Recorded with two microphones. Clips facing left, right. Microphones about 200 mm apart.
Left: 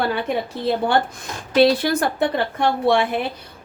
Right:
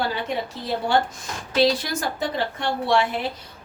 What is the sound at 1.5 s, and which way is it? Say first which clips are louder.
A woman's voice: left 5 dB; 60° left (ahead or behind).